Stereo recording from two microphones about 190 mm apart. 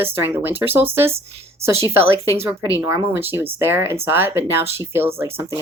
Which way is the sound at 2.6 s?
15° right (ahead or behind).